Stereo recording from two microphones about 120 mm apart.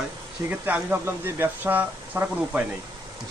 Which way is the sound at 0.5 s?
15° right (ahead or behind).